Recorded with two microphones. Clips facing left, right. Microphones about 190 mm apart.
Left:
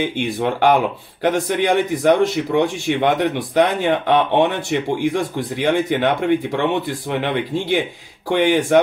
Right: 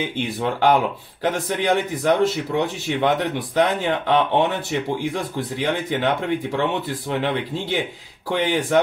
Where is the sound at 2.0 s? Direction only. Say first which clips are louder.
Left 3 dB; 15° left (ahead or behind).